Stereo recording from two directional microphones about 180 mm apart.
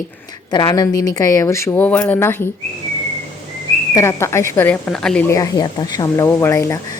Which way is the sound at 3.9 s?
15° left (ahead or behind).